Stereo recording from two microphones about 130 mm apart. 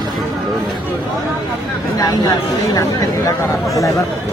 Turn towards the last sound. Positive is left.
turn(degrees=25)  # may be behind; listen again after turning